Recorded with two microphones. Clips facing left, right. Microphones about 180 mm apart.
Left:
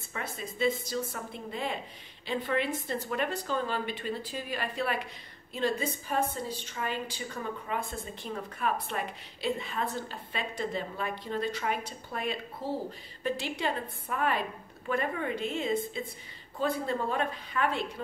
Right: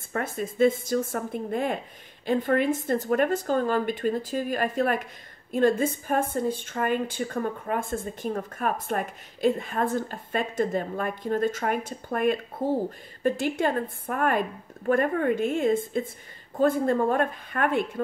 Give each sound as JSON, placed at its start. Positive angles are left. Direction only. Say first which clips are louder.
{"t": 0.1, "sound": "a woman's voice", "louder": "right 9 dB", "side_deg": -50}